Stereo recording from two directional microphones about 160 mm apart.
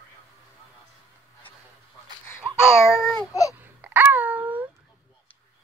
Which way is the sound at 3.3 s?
20° left (ahead or behind).